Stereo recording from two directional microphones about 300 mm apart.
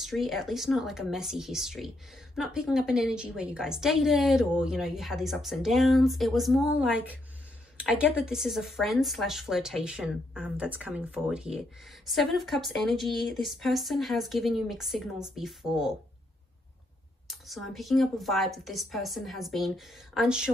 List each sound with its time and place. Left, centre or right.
0.0 s a woman's voice: centre
17.3 s a woman's voice: centre